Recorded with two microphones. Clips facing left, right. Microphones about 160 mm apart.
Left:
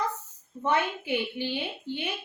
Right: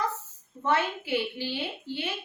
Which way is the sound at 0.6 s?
15° left (ahead or behind).